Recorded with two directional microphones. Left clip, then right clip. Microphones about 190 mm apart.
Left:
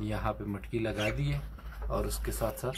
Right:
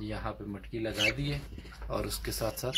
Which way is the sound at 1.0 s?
5° right (ahead or behind).